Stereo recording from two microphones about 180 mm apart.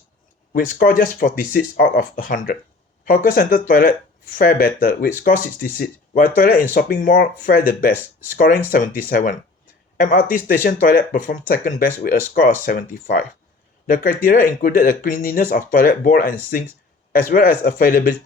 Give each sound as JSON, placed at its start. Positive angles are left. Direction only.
{"t": 0.5, "sound": "speech", "side_deg": 50}